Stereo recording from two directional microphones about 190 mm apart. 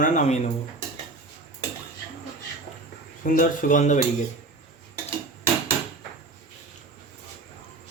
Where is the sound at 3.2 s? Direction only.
45° left (ahead or behind).